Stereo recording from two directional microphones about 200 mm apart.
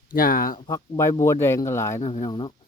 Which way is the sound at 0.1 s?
45° left (ahead or behind).